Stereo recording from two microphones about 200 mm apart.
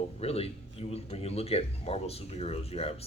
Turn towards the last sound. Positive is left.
turn(degrees=30)  # may be behind; listen again after turning